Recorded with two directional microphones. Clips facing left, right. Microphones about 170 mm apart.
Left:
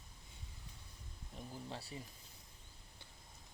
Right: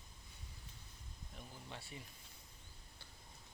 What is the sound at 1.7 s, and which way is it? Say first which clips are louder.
Speech: left 2 dB; 35° left (ahead or behind).